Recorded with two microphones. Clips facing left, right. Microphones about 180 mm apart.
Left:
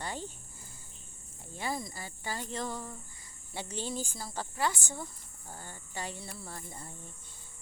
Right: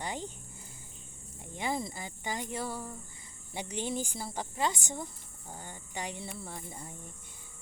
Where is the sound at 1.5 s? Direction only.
20° right (ahead or behind).